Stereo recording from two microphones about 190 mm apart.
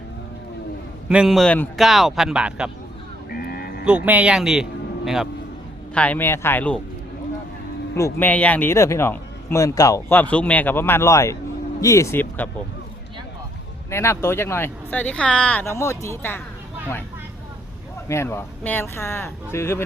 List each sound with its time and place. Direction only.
1.0 s speech: 5° right (ahead or behind)
3.2 s music: 50° left (ahead or behind)
3.8 s a man's voice: 5° right (ahead or behind)
7.9 s a man's voice: 15° left (ahead or behind)
13.9 s a man's voice: 15° left (ahead or behind)
18.1 s a man's voice: 15° left (ahead or behind)